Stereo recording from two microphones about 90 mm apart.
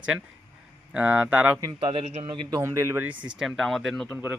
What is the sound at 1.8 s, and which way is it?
Speech, 75° right (ahead or behind).